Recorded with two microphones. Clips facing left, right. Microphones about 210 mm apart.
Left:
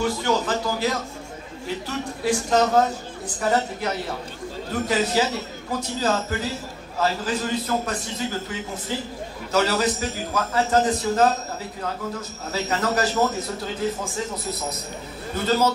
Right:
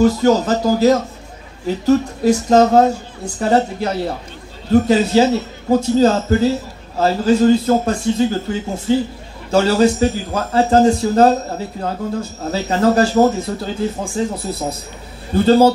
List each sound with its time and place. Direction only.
0.0 s a man's voice: 40° right (ahead or behind)
3.3 s a man's voice: 30° right (ahead or behind)